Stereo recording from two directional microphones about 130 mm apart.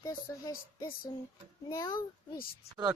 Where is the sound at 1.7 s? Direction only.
25° left (ahead or behind).